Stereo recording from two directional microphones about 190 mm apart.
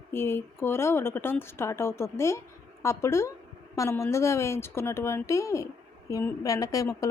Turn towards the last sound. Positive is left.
turn(degrees=15)  # may be behind; listen again after turning